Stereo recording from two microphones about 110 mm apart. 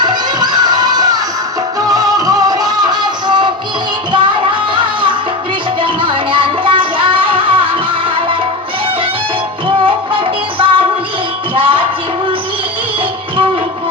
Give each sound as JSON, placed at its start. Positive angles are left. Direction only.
{"t": 0.0, "sound": "children shouting", "side_deg": -40}
{"t": 1.9, "sound": "music", "side_deg": -35}
{"t": 4.7, "sound": "music", "side_deg": -45}
{"t": 9.8, "sound": "music", "side_deg": -50}